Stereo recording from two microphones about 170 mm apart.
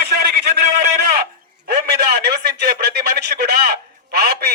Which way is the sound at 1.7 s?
75° right (ahead or behind).